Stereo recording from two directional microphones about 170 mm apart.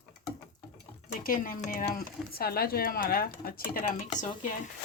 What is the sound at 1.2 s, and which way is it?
Speech, 55° left (ahead or behind).